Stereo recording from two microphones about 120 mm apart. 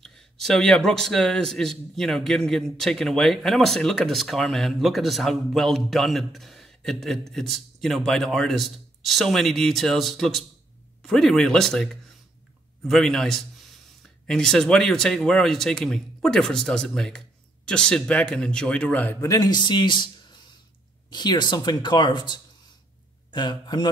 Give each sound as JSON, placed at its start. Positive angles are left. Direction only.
{"t": 0.0, "sound": "a man's voice", "side_deg": 5}
{"t": 19.2, "sound": "a man's voice", "side_deg": 30}